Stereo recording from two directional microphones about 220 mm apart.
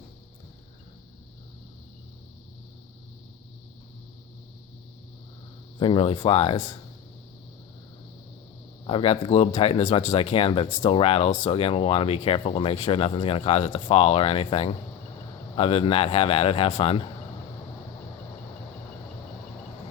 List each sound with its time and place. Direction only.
5.8 s speech: 25° left (ahead or behind)
8.9 s speech: 25° left (ahead or behind)